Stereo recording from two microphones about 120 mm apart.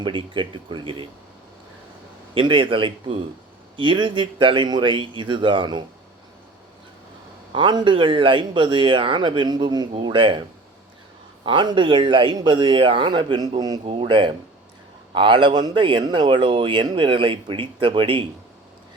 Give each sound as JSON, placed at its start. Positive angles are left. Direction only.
{"t": 0.0, "sound": "speech", "side_deg": -45}
{"t": 2.3, "sound": "speech", "side_deg": -45}
{"t": 7.5, "sound": "speech", "side_deg": -40}
{"t": 11.4, "sound": "speech", "side_deg": -45}
{"t": 13.8, "sound": "speech", "side_deg": -50}